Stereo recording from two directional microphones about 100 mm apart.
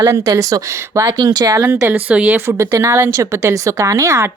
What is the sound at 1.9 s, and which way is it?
Speech, 15° right (ahead or behind).